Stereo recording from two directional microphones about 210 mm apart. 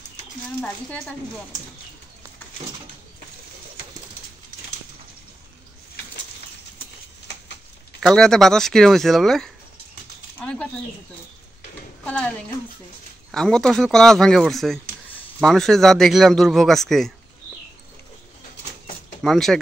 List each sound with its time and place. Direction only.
0.6 s speech: 5° left (ahead or behind)
8.0 s speech: centre (ahead or behind)
12.0 s a woman's voice: 5° left (ahead or behind)
13.3 s speech: 5° left (ahead or behind)
19.2 s speech: centre (ahead or behind)